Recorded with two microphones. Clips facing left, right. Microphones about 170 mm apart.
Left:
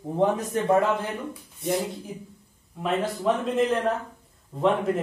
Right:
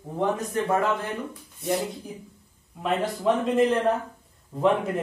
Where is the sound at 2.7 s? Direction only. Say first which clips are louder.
Even; centre (ahead or behind).